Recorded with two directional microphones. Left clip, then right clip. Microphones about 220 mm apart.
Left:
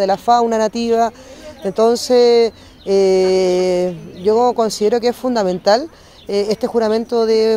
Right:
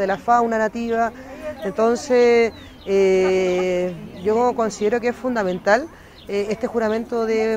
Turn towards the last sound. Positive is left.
turn(degrees=40)  # may be behind; listen again after turning